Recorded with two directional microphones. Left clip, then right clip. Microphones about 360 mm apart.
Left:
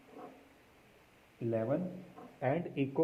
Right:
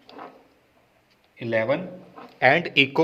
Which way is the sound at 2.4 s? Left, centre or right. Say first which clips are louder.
Right 17 dB; right.